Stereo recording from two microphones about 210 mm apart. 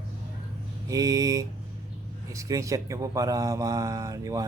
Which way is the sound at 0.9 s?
15° right (ahead or behind).